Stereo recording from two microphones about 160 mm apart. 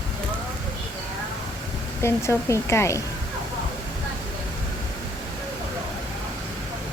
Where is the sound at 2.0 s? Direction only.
15° left (ahead or behind).